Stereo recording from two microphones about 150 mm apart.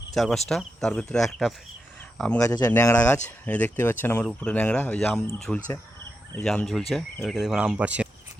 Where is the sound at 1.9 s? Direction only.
10° left (ahead or behind).